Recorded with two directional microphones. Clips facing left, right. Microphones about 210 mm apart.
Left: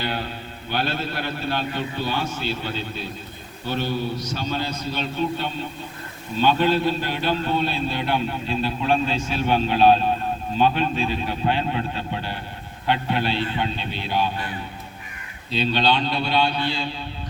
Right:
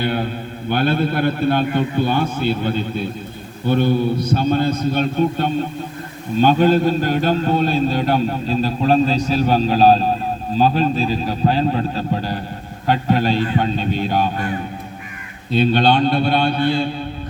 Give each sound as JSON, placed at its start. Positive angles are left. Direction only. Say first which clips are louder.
{"t": 0.0, "sound": "a man's voice", "louder": "right 7 dB", "side_deg": -55}